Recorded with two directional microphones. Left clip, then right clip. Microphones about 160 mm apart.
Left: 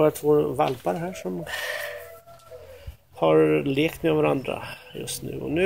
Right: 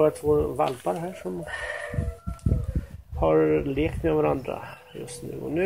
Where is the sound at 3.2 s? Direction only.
30° left (ahead or behind).